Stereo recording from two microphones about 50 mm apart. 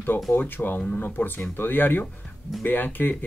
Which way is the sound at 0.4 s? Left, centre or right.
Left.